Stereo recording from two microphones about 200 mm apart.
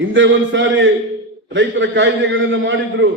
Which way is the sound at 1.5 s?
65° right (ahead or behind).